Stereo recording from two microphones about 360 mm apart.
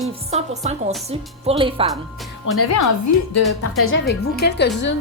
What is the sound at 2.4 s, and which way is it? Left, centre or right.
Speech, left.